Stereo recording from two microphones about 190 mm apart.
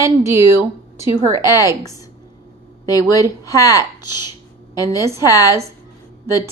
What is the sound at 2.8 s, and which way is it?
Speech, 20° left (ahead or behind).